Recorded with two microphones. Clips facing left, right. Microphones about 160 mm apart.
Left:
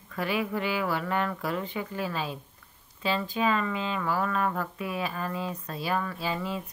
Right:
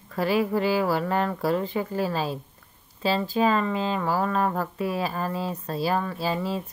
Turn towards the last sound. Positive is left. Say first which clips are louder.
# right 4 dB
turn(degrees=-35)  # may be behind; listen again after turning